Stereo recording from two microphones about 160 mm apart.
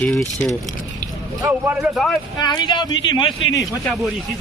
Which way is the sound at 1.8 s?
Centre (ahead or behind).